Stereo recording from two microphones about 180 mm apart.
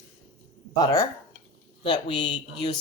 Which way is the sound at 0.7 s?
15° left (ahead or behind).